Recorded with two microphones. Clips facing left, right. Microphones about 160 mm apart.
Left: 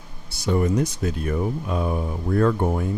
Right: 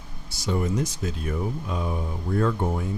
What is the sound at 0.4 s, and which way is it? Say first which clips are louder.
Speech: left 5 dB; 60° left (ahead or behind).